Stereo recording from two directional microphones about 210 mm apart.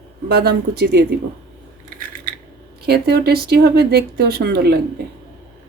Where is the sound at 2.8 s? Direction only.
50° right (ahead or behind).